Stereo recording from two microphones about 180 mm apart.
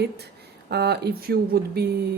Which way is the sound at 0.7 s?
65° right (ahead or behind).